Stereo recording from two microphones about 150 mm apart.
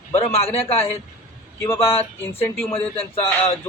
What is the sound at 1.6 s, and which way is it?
A man's voice, 15° left (ahead or behind).